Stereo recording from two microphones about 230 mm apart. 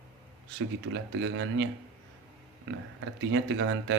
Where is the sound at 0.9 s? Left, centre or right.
Right.